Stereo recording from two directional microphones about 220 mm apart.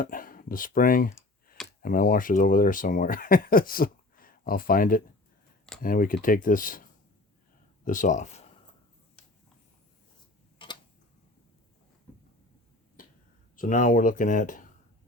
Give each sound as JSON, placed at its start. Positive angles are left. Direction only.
{"t": 0.0, "sound": "clicking", "side_deg": 40}
{"t": 1.8, "sound": "speech", "side_deg": 40}
{"t": 7.9, "sound": "speech", "side_deg": 35}
{"t": 13.6, "sound": "speech", "side_deg": 35}